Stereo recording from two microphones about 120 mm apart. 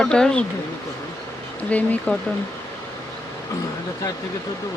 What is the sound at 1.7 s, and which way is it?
Speech, 10° left (ahead or behind).